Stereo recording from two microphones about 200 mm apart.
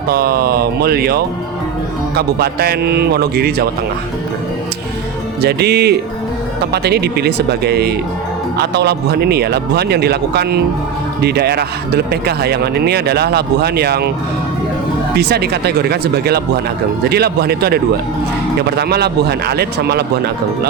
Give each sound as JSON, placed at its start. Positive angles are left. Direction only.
{"t": 0.1, "sound": "speech", "side_deg": -50}
{"t": 5.4, "sound": "music", "side_deg": -55}
{"t": 6.8, "sound": "speech", "side_deg": -55}
{"t": 15.1, "sound": "speech", "side_deg": -55}